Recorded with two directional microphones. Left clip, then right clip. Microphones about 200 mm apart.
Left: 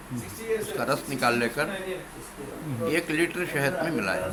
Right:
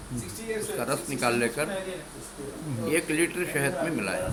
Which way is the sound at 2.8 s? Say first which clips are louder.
Left 1 dB; 15° left (ahead or behind).